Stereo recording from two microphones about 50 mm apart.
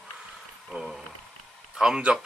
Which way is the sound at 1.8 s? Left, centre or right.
Centre.